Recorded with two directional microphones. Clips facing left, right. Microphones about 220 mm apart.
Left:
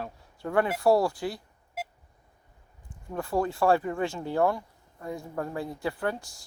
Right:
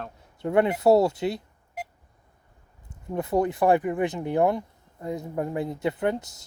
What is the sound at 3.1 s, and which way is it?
Speech, 20° right (ahead or behind).